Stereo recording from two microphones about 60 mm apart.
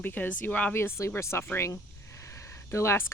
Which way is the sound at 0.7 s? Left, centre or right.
Left.